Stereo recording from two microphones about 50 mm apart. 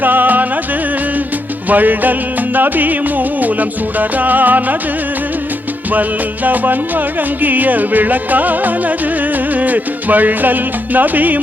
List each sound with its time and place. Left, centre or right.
0.0 s music: right
1.7 s music: right
5.9 s music: right